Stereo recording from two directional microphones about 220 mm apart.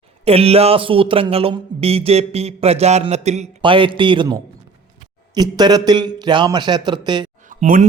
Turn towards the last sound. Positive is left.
turn(degrees=-40)  # may be behind; listen again after turning